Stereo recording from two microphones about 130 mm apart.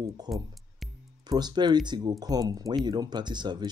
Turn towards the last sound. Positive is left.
turn(degrees=-35)  # may be behind; listen again after turning